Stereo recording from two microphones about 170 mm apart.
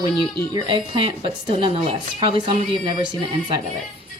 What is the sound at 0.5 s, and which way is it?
A woman's voice, 30° right (ahead or behind).